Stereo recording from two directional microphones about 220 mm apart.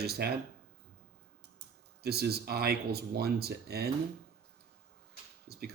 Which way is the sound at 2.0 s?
45° right (ahead or behind).